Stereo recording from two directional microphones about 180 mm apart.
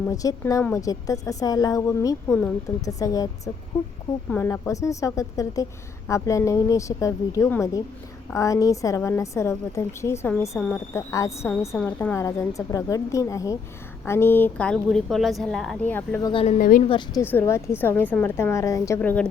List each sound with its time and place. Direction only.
0.1 s a woman's voice: 20° left (ahead or behind)
16.3 s a woman's voice: 30° left (ahead or behind)
16.6 s a woman's voice: 50° left (ahead or behind)
17.2 s a woman's voice: 15° left (ahead or behind)